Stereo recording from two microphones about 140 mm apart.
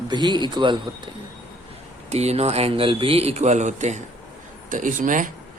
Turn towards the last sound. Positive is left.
turn(degrees=-65)  # may be behind; listen again after turning